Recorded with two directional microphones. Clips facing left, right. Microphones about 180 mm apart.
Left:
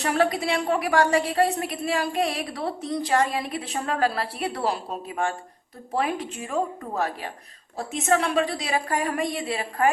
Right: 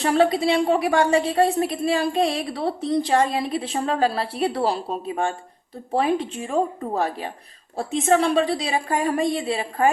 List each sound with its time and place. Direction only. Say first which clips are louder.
0.0 s a woman's voice: right 4 dB; 25° right (ahead or behind)